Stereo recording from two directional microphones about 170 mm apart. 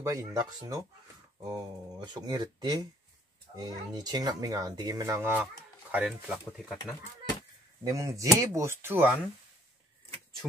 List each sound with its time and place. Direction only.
0.0 s speech: 20° right (ahead or behind); by 7.0 s centre (ahead or behind)
7.8 s speech: 20° right (ahead or behind)